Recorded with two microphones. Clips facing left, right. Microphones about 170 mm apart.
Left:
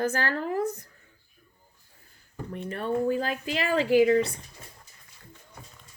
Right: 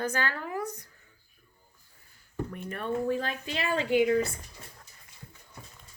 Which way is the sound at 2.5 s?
30° left (ahead or behind).